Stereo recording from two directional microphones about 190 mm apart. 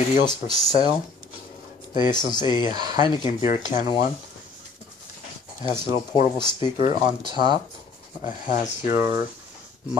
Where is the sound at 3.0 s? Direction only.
25° left (ahead or behind).